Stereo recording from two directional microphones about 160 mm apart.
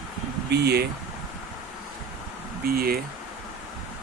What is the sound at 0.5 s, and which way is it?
Speech, 90° right.